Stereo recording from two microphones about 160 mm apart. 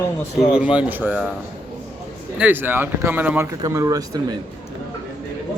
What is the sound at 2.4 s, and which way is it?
Speech, 10° right (ahead or behind).